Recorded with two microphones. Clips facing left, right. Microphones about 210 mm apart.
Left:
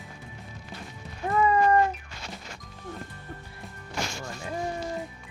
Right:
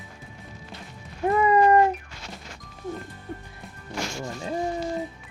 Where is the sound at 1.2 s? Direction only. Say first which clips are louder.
Right 4 dB; 20° right (ahead or behind).